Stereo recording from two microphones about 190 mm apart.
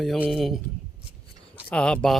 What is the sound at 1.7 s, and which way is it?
Speech, 5° left (ahead or behind).